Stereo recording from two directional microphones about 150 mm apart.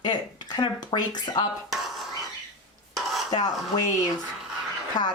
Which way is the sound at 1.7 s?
Centre (ahead or behind).